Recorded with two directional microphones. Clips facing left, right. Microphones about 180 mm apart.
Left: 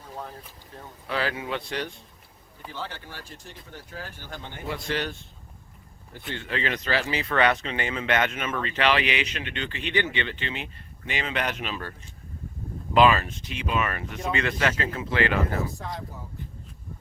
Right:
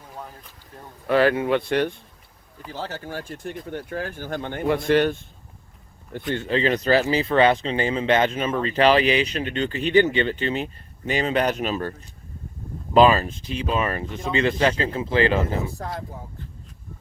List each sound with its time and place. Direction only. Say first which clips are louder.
1.0 s speech: right 11 dB; 55° right (ahead or behind)
2.7 s speech: right 7 dB; 40° right (ahead or behind)
6.1 s speech: right 8 dB; 45° right (ahead or behind)